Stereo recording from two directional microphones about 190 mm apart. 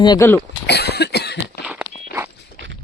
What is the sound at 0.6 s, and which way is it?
Cough, 60° left (ahead or behind).